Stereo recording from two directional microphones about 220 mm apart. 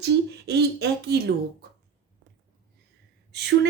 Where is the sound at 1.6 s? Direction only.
45° right (ahead or behind).